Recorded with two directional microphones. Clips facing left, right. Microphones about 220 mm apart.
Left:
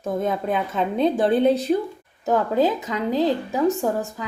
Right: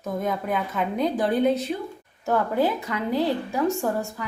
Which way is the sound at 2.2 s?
15° left (ahead or behind).